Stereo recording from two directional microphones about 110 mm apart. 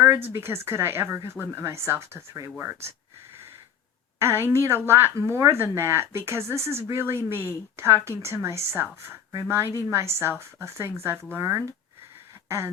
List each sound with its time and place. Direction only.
0.0 s a woman's voice: 20° right (ahead or behind)
4.2 s a woman's voice: 20° right (ahead or behind)